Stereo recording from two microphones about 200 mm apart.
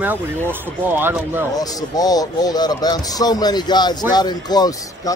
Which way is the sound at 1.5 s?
20° left (ahead or behind).